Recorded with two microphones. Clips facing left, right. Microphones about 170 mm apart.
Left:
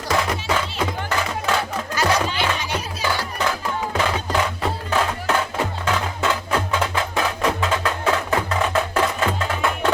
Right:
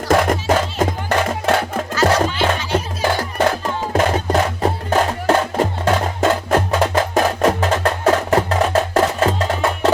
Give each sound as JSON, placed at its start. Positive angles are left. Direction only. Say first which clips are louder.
{"t": 0.1, "sound": "music", "louder": "right 7 dB", "side_deg": -50}